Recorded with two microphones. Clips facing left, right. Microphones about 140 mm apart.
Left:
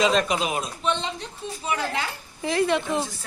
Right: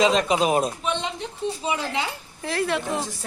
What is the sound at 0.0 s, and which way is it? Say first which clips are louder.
Speech: right 2 dB; 20° right (ahead or behind).